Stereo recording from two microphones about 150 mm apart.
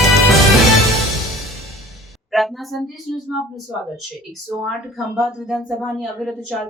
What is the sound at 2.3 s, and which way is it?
Speech, centre (ahead or behind).